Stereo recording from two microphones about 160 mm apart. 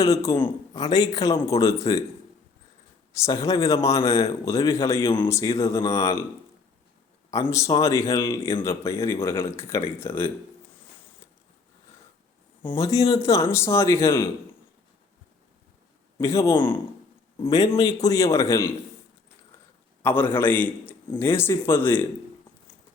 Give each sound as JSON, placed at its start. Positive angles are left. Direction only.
{"t": 0.0, "sound": "a man's voice", "side_deg": 20}
{"t": 3.1, "sound": "a man's voice", "side_deg": 20}
{"t": 7.3, "sound": "a man's voice", "side_deg": 20}
{"t": 12.6, "sound": "a man's voice", "side_deg": 20}
{"t": 16.1, "sound": "a man's voice", "side_deg": 20}
{"t": 20.0, "sound": "a man's voice", "side_deg": 15}